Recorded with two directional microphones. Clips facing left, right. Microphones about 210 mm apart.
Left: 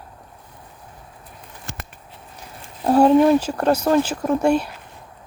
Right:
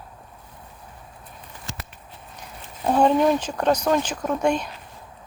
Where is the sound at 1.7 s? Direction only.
55° left (ahead or behind).